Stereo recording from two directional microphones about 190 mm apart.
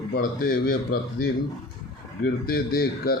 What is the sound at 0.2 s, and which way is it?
Speech, 50° left (ahead or behind).